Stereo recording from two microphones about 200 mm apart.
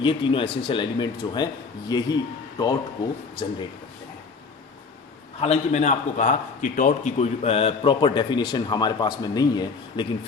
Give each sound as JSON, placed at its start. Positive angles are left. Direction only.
{"t": 0.0, "sound": "a man's voice", "side_deg": 25}
{"t": 5.4, "sound": "a man's voice", "side_deg": 35}